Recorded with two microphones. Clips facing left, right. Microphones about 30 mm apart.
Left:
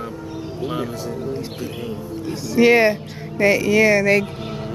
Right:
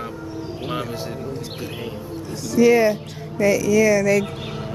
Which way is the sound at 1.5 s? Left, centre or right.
Centre.